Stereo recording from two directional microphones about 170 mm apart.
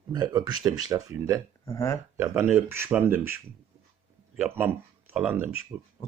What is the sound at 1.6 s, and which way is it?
Speech, 15° left (ahead or behind).